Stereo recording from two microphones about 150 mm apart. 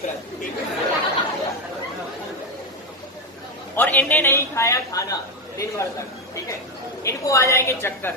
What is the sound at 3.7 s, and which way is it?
A man's voice, 10° left (ahead or behind).